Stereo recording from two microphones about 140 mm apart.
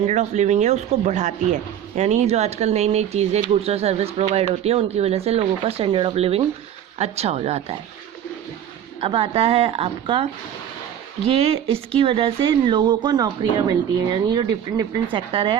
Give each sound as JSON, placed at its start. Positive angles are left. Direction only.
{"t": 0.0, "sound": "speech", "side_deg": -55}
{"t": 9.0, "sound": "speech", "side_deg": -35}
{"t": 11.3, "sound": "speech", "side_deg": -45}